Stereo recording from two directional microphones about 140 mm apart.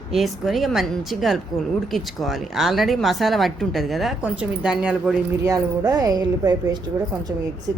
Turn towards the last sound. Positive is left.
turn(degrees=-20)  # may be behind; listen again after turning